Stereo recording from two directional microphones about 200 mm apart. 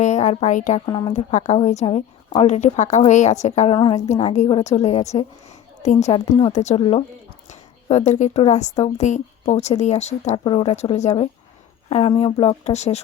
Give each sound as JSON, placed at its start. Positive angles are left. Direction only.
{"t": 0.0, "sound": "a woman's voice", "side_deg": 35}
{"t": 0.9, "sound": "a woman's voice", "side_deg": 25}
{"t": 1.1, "sound": "a woman's voice", "side_deg": 35}
{"t": 4.1, "sound": "a woman's voice", "side_deg": 35}